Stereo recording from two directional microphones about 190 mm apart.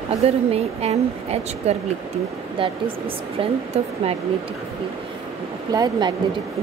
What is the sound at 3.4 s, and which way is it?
Speech, 30° right (ahead or behind).